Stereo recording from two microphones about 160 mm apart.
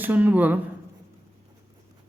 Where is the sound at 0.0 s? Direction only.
10° right (ahead or behind).